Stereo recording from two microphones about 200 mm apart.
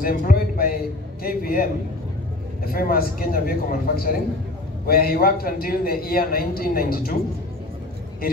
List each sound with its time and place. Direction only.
0.0 s a man's voice: 45° left (ahead or behind)